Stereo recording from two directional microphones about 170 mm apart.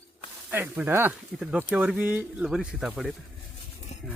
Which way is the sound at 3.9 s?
40° left (ahead or behind).